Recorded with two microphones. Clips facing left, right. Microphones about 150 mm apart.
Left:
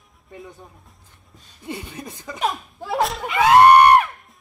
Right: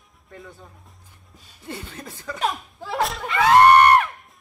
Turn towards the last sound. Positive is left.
turn(degrees=10)  # may be behind; listen again after turning